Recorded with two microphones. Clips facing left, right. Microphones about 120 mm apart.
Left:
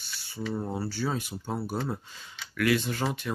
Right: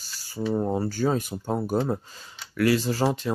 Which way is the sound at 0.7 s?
45° right (ahead or behind).